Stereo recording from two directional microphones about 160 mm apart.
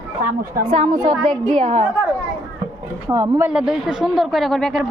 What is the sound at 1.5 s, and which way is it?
Speech, 45° right (ahead or behind).